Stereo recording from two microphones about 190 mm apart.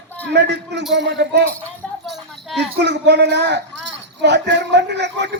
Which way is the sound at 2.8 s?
65° right (ahead or behind).